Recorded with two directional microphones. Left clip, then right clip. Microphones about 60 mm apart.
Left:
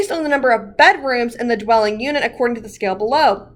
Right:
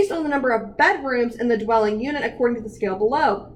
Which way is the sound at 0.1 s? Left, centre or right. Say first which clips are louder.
Left 5 dB; left.